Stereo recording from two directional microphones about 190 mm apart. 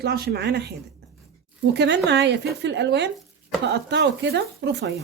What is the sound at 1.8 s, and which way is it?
Speech, 65° right (ahead or behind).